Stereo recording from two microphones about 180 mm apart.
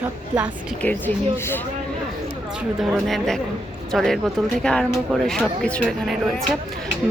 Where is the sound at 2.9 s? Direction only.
Centre (ahead or behind).